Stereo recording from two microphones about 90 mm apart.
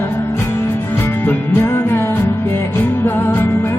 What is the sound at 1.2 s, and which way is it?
Music, 25° left (ahead or behind).